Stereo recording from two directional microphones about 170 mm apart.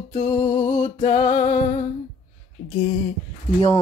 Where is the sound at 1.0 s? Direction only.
45° left (ahead or behind).